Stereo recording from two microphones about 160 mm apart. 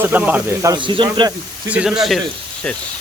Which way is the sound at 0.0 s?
10° right (ahead or behind).